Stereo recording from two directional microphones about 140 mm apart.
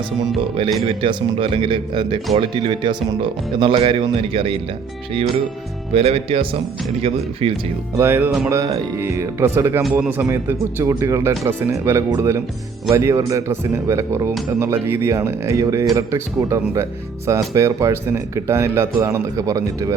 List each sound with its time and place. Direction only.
0.9 s speech: 40° right (ahead or behind)
5.9 s speech: 45° right (ahead or behind)
7.9 s speech: 15° right (ahead or behind)